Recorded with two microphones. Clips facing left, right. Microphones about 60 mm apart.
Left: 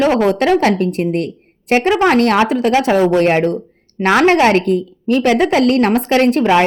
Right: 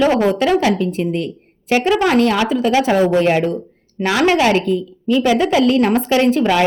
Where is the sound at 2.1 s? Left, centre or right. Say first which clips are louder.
Left 2 dB; left.